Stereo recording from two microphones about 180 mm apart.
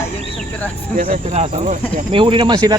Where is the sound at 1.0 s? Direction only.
40° right (ahead or behind).